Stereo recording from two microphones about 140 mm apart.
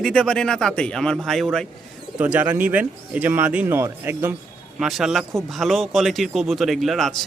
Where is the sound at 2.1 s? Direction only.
10° right (ahead or behind).